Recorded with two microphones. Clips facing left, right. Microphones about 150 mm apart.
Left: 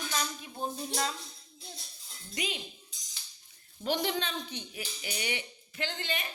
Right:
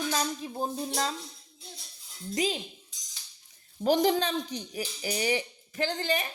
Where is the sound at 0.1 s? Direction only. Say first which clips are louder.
Right 6 dB; 35° right (ahead or behind).